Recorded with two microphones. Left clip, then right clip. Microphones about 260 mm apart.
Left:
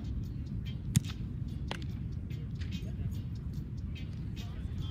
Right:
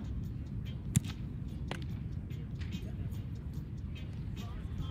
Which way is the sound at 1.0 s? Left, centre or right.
Centre.